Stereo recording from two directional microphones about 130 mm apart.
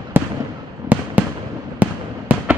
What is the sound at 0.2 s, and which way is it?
Fireworks, 15° right (ahead or behind).